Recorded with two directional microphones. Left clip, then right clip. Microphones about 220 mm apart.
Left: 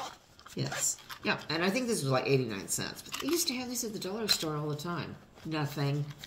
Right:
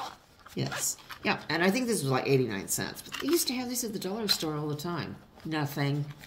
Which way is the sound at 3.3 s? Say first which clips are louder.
Right 3 dB; 30° right (ahead or behind).